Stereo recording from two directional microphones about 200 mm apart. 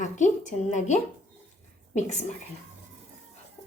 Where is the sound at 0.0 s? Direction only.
35° left (ahead or behind).